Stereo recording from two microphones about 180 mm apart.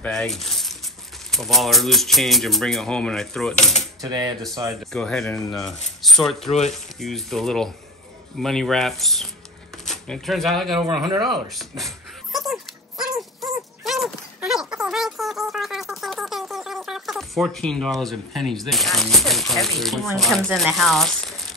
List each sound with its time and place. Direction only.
0.0 s rattle: 5° left (ahead or behind)
1.3 s speech: centre (ahead or behind)
4.0 s speech: 20° right (ahead or behind)
4.9 s speech: 5° left (ahead or behind)
11.1 s a sound: centre (ahead or behind)
13.0 s dog: centre (ahead or behind)
20.2 s speech: centre (ahead or behind)